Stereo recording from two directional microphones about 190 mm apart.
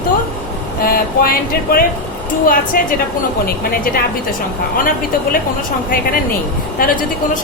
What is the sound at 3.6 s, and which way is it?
Speech, 50° left (ahead or behind).